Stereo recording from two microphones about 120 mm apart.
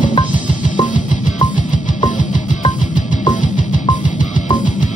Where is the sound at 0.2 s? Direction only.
90° left.